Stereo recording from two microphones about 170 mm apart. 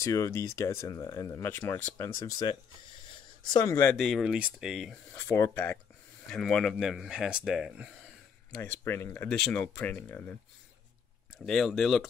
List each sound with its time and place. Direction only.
0.0 s speech: 20° left (ahead or behind)
3.1 s a sound: 25° left (ahead or behind)
3.9 s speech: centre (ahead or behind)
5.1 s speech: 15° left (ahead or behind); by 8.5 s 5° right (ahead or behind)
8.6 s speech: 15° left (ahead or behind)
11.4 s speech: centre (ahead or behind)